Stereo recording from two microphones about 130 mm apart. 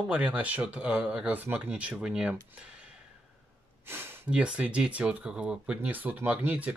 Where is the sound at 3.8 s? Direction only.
20° right (ahead or behind).